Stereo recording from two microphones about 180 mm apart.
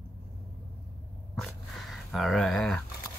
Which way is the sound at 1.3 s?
Centre (ahead or behind).